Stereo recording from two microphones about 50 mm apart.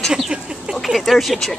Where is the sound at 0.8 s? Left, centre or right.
Centre.